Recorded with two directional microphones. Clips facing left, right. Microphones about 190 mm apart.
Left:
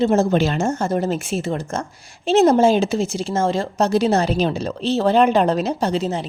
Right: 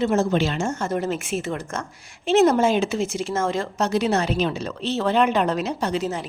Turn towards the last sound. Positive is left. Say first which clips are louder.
# left 4 dB
turn(degrees=25)  # may be behind; listen again after turning